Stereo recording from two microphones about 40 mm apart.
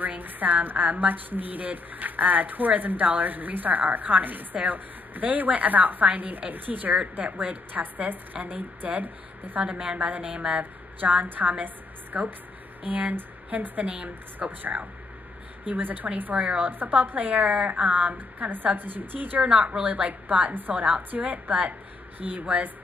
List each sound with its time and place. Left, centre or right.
0.0 s a woman's voice: right
9.6 s a woman's voice: right
10.6 s a woman's voice: right
16.3 s a woman's voice: right
16.6 s a woman's voice: right
17.4 s a woman's voice: right
18.1 s a woman's voice: right
19.4 s a woman's voice: right